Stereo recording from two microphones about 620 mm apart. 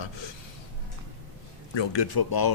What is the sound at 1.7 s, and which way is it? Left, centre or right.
Speech, left.